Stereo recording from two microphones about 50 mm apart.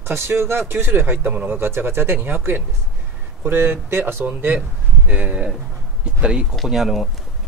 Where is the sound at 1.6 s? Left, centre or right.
Right.